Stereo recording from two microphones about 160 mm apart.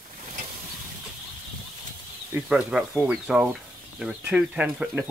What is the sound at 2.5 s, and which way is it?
Speech, 5° right (ahead or behind).